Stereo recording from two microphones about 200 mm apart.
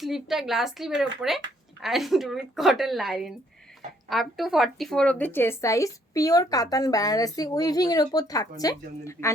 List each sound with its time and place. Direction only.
0.0 s speech: centre (ahead or behind); by 9.3 s 15° left (ahead or behind)